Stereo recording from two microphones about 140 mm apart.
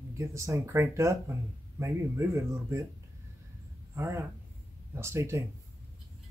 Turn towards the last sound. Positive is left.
turn(degrees=-20)  # may be behind; listen again after turning